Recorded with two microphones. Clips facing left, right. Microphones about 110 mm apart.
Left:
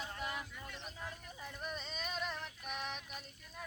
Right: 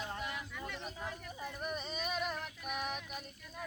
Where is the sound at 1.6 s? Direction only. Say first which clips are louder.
Right 4 dB; 10° right (ahead or behind).